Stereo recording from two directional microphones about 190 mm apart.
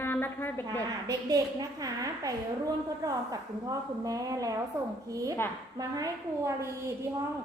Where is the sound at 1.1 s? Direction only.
20° right (ahead or behind).